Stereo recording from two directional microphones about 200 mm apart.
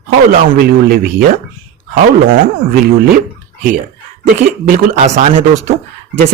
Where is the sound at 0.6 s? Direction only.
50° right (ahead or behind).